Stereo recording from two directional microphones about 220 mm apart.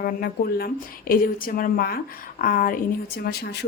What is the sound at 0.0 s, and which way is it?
Speech, 45° left (ahead or behind).